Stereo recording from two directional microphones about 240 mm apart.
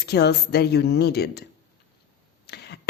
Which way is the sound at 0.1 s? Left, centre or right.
Left.